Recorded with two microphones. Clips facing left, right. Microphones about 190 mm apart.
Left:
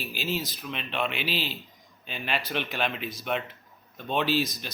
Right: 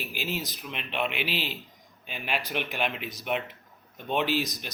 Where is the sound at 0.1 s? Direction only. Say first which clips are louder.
Left 4 dB; 15° right (ahead or behind).